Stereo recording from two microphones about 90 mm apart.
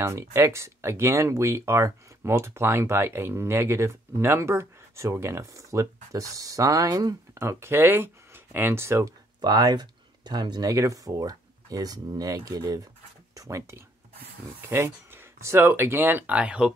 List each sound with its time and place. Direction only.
0.0 s speech: 30° right (ahead or behind)
7.3 s speech: 30° right (ahead or behind)
9.4 s speech: 50° right (ahead or behind)
10.7 s speech: 40° right (ahead or behind)
13.3 s speech: 35° right (ahead or behind); by 16.7 s 10° right (ahead or behind)